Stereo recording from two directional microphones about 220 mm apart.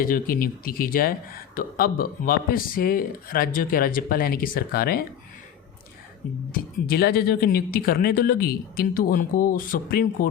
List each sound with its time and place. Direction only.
0.0 s speech: 40° left (ahead or behind)
6.5 s speech: 45° left (ahead or behind)